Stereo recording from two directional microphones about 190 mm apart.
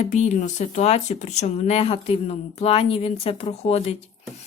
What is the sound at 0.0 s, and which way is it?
Speech, 35° left (ahead or behind).